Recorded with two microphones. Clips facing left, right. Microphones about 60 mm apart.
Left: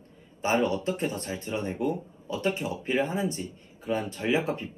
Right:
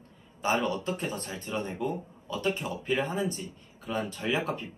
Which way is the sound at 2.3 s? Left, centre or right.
Left.